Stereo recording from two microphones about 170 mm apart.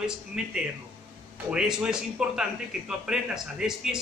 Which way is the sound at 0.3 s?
5° right (ahead or behind).